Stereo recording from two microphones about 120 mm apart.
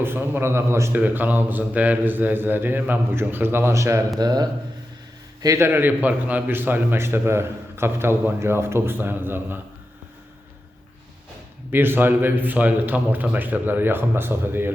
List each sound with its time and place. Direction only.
0.0 s a man's voice: 20° right (ahead or behind); by 4.4 s 35° right (ahead or behind)
5.4 s a man's voice: 25° right (ahead or behind)
11.7 s a man's voice: 20° right (ahead or behind)